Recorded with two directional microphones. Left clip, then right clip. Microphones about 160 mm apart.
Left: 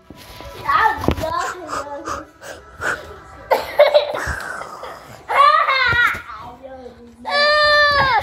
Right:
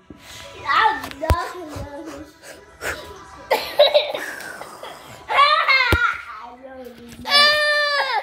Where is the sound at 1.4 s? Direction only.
10° left (ahead or behind).